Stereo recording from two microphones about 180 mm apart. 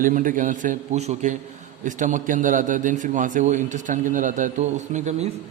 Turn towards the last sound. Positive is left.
turn(degrees=-40)  # may be behind; listen again after turning